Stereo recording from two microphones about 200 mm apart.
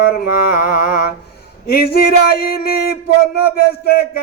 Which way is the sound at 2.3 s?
50° left (ahead or behind).